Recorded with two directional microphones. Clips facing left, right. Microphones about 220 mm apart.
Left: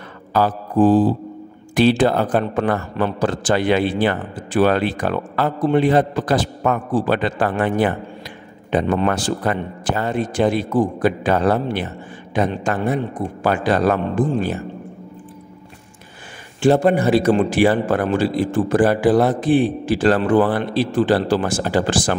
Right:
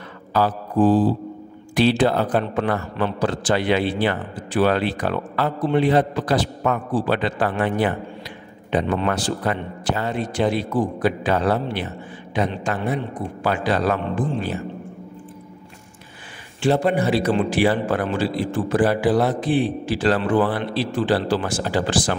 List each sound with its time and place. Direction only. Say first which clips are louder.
0.3 s mantra: left 2 dB; 50° left (ahead or behind)
1.8 s a man's voice: left 3 dB; 50° left (ahead or behind)
16.6 s a man's voice: left 4 dB; 45° left (ahead or behind)